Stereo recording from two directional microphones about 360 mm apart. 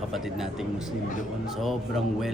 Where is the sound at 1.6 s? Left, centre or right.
Centre.